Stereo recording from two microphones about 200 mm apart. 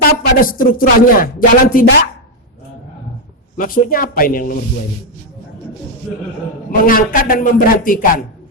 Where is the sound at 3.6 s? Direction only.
45° left (ahead or behind).